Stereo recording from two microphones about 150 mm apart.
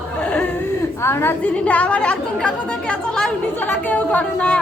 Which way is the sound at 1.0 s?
15° left (ahead or behind).